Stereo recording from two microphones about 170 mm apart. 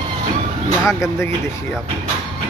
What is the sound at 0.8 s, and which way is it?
Speech, 15° left (ahead or behind).